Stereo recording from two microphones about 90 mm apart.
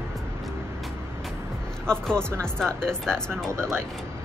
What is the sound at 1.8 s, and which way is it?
Speech, 10° left (ahead or behind).